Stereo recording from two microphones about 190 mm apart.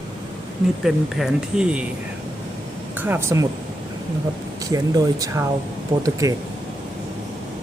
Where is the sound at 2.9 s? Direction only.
10° right (ahead or behind).